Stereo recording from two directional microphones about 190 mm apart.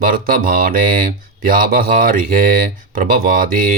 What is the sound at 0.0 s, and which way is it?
Speech, 50° right (ahead or behind).